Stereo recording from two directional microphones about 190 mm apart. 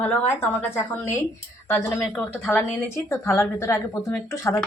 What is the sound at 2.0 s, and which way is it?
A woman's voice, centre (ahead or behind).